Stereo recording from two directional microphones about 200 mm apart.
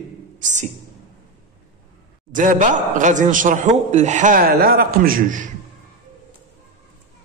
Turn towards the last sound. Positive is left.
turn(degrees=-40)  # may be behind; listen again after turning